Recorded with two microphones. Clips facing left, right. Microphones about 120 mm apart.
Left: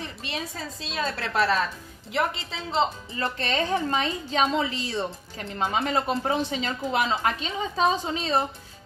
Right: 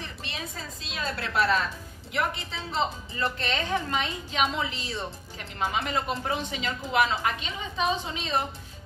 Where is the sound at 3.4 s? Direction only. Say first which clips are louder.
Left 7 dB; 35° left (ahead or behind).